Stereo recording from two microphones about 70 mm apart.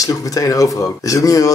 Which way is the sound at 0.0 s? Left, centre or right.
Left.